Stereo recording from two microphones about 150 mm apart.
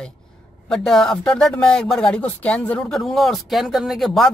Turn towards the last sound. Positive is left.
turn(degrees=0)  # may be behind; listen again after turning